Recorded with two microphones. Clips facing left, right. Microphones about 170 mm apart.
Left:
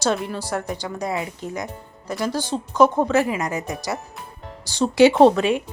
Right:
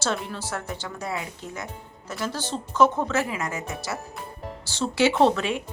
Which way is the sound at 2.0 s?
15° left (ahead or behind).